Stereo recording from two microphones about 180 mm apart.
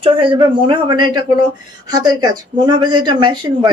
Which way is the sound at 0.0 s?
30° right (ahead or behind).